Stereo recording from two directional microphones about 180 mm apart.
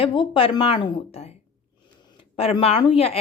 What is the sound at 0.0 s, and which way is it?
Speech, 30° left (ahead or behind).